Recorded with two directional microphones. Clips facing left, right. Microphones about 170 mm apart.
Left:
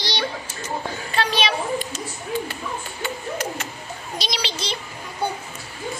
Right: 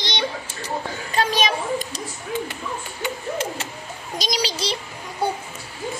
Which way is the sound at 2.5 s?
20° right (ahead or behind).